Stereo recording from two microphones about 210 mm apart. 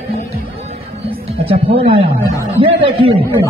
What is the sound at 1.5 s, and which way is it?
Speech, 25° right (ahead or behind).